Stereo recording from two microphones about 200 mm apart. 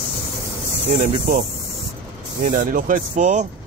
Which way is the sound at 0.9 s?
40° right (ahead or behind).